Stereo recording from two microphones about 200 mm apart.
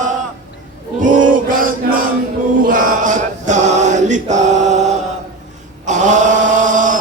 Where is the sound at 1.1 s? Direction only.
40° right (ahead or behind).